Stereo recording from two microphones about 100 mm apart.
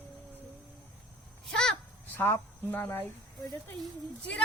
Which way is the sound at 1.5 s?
5° left (ahead or behind).